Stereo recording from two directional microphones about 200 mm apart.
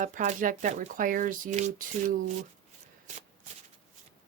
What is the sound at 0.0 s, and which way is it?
Speech, 40° right (ahead or behind).